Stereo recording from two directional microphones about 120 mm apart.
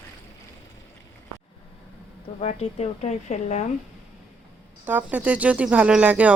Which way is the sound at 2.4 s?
60° left (ahead or behind).